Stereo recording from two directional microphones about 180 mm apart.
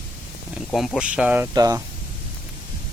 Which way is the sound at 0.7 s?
Centre (ahead or behind).